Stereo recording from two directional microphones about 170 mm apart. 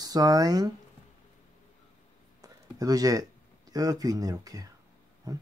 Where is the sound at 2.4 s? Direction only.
20° right (ahead or behind).